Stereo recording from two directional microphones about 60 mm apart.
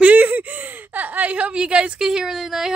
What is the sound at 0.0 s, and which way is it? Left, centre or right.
Speech, right.